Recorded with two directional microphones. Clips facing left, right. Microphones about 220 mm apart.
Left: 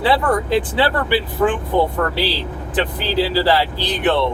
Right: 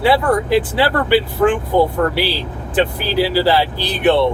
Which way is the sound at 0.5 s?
20° left (ahead or behind).